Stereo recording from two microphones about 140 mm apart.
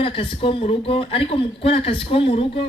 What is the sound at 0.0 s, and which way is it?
Speech, 40° left (ahead or behind).